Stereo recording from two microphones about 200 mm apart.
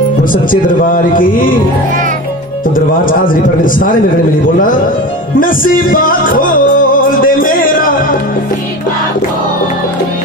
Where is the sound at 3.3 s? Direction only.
45° left (ahead or behind).